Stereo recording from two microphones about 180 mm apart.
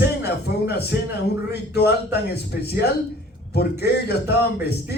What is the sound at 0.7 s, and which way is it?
Speech, 65° left (ahead or behind).